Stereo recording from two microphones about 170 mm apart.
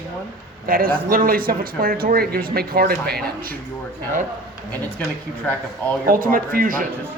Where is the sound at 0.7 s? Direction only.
60° right (ahead or behind).